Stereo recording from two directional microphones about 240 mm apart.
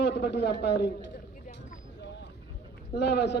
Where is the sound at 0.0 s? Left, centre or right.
Left.